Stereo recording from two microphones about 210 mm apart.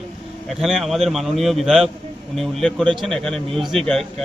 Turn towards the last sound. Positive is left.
turn(degrees=0)  # may be behind; listen again after turning